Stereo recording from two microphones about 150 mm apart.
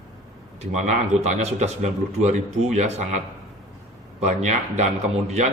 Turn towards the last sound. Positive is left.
turn(degrees=-50)  # may be behind; listen again after turning